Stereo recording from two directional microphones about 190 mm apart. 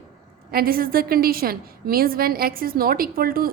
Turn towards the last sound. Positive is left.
turn(degrees=-50)  # may be behind; listen again after turning